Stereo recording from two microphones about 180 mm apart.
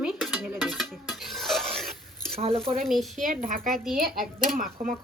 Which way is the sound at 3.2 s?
45° right (ahead or behind).